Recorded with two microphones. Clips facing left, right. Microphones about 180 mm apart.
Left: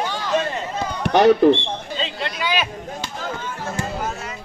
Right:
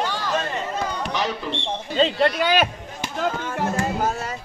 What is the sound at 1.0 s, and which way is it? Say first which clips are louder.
Speech: left 13 dB; 60° left (ahead or behind).